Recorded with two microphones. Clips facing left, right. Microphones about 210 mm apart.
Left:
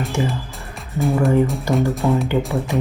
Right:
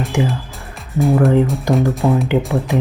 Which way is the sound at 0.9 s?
Centre (ahead or behind).